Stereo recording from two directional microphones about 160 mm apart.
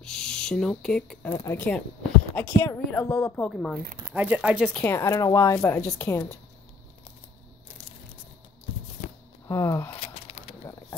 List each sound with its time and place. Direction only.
0.0 s speech: 5° left (ahead or behind)
1.3 s a woman's voice: 15° left (ahead or behind)
4.1 s speech: 10° right (ahead or behind)
4.8 s a woman's voice: 15° left (ahead or behind)
9.5 s speech: 20° left (ahead or behind)
9.9 s a sound: 35° left (ahead or behind)